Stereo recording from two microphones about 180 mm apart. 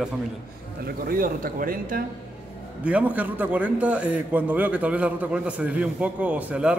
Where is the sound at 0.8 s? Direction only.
55° right (ahead or behind).